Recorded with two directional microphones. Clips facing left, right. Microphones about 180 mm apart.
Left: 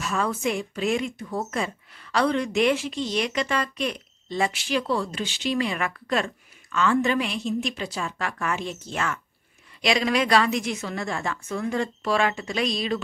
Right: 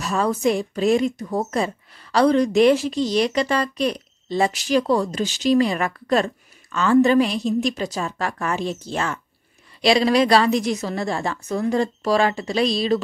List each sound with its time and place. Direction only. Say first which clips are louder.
0.0 s a woman's voice: right 5 dB; 35° right (ahead or behind)